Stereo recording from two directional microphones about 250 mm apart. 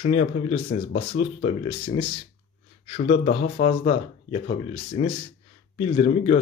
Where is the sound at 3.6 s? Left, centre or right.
Left.